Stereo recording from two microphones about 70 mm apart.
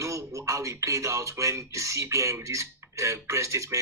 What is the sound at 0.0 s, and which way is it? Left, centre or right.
A man's voice, right.